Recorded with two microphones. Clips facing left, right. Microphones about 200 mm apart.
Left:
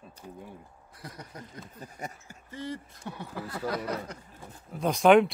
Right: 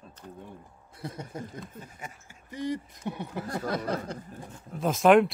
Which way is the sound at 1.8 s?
40° left (ahead or behind).